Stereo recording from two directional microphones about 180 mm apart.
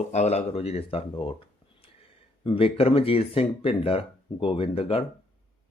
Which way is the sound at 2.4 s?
30° left (ahead or behind).